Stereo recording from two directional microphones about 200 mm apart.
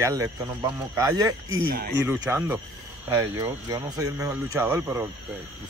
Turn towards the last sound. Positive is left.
turn(degrees=-15)  # may be behind; listen again after turning